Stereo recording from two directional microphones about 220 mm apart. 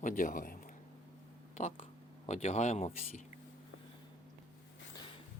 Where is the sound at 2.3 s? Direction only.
30° left (ahead or behind).